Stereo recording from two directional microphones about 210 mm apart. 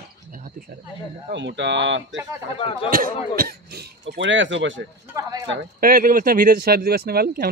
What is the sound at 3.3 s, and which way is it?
Speech, 45° right (ahead or behind).